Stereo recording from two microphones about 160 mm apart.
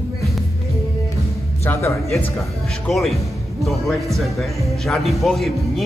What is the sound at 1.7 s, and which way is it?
Music, 15° left (ahead or behind).